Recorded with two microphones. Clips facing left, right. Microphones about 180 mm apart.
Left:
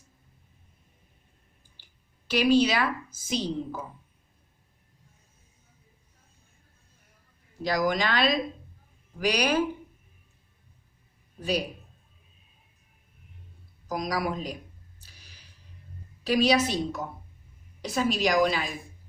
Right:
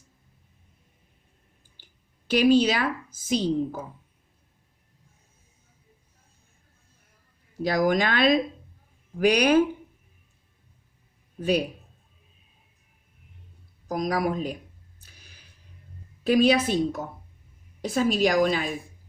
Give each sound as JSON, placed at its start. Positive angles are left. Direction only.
{"t": 2.2, "sound": "speech", "side_deg": -50}
{"t": 7.6, "sound": "speech", "side_deg": -50}
{"t": 11.3, "sound": "speech", "side_deg": -55}
{"t": 13.8, "sound": "speech", "side_deg": -50}
{"t": 15.0, "sound": "a sound", "side_deg": -50}
{"t": 16.2, "sound": "speech", "side_deg": -50}